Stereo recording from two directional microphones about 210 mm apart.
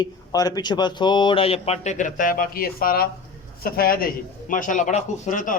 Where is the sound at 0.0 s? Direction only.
20° left (ahead or behind).